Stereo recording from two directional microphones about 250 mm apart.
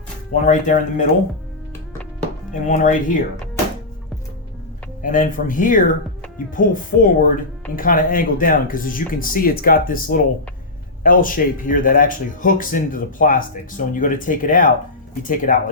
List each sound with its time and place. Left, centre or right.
0.4 s speech: left
2.5 s speech: left
5.0 s speech: left